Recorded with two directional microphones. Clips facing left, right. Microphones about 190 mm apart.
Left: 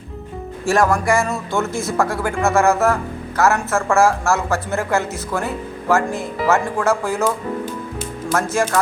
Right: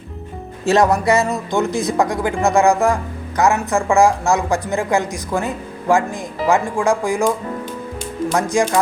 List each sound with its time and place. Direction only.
0.6 s speech: 20° right (ahead or behind)